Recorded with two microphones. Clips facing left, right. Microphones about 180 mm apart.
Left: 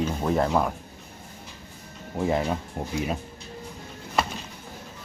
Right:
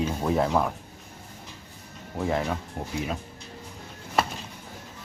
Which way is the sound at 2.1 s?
20° left (ahead or behind).